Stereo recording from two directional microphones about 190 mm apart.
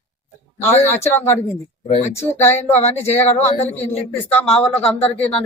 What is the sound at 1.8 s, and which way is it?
Speech, 35° left (ahead or behind).